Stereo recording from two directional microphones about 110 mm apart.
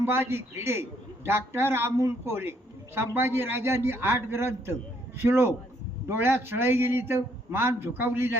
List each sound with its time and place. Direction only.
0.0 s a man's voice: 20° right (ahead or behind)